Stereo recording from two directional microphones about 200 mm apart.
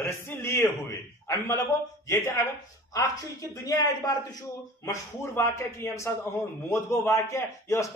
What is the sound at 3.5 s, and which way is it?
A man's voice, 15° left (ahead or behind).